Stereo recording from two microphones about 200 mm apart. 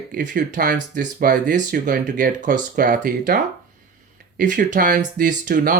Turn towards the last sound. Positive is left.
turn(degrees=-45)  # may be behind; listen again after turning